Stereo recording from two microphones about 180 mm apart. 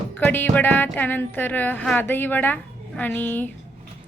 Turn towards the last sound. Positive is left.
turn(degrees=10)  # may be behind; listen again after turning